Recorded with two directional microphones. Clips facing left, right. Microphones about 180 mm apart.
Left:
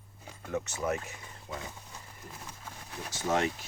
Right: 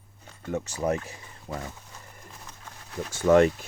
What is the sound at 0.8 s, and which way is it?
Speech, 35° right (ahead or behind).